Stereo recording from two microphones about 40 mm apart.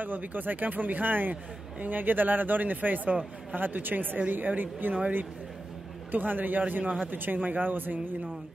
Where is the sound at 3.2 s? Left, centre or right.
Right.